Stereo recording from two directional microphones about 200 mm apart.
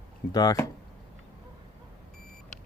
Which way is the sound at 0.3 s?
15° left (ahead or behind).